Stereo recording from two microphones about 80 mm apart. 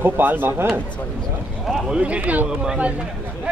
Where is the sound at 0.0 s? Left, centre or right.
Right.